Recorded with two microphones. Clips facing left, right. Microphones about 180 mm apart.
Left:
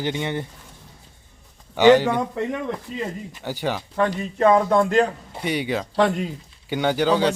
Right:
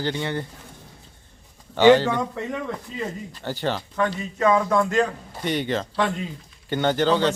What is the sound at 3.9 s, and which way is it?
A man's voice, 35° left (ahead or behind).